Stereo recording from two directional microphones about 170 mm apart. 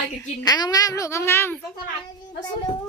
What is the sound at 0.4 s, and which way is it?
Speech, 25° left (ahead or behind).